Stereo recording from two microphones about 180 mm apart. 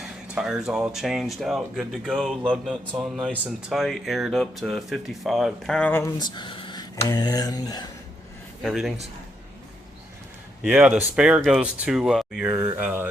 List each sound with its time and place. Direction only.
0.0 s speech: 5° right (ahead or behind)
6.3 s speech: 25° left (ahead or behind)
8.6 s speech: centre (ahead or behind)
10.6 s speech: 5° right (ahead or behind)